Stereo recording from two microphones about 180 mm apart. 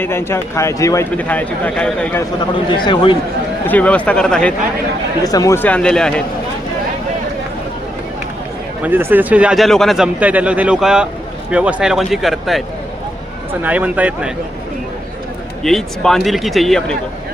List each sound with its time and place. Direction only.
0.0 s speech: 15° left (ahead or behind)
2.4 s a man's voice: 25° left (ahead or behind)
3.7 s speech: 10° left (ahead or behind)
5.2 s speech: 20° left (ahead or behind); by 6.2 s 5° left (ahead or behind)
8.8 s a man's voice: 10° right (ahead or behind)
15.6 s a man's voice: centre (ahead or behind)